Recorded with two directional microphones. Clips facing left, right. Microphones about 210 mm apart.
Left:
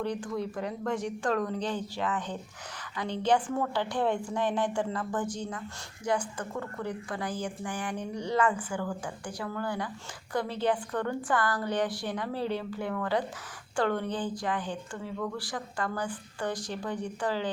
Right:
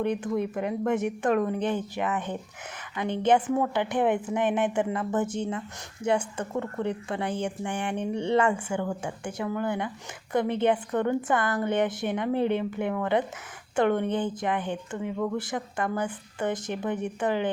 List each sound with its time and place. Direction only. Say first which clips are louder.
0.0 s speech: right 5 dB; 20° right (ahead or behind)